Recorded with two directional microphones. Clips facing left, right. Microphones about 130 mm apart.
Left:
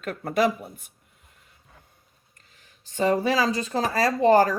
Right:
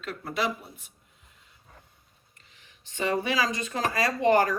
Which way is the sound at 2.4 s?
40° left (ahead or behind).